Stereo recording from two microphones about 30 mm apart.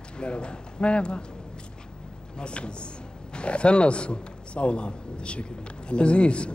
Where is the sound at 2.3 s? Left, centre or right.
Left.